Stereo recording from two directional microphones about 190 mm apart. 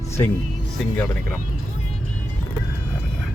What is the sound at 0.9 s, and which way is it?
Speech, 5° left (ahead or behind).